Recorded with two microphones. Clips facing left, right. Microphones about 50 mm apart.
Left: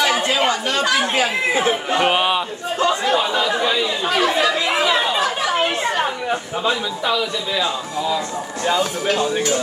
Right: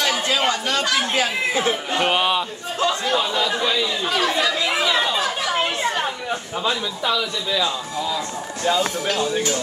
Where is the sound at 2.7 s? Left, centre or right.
Left.